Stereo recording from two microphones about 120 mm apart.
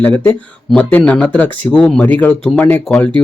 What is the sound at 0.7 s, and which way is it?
A man's voice, 10° left (ahead or behind).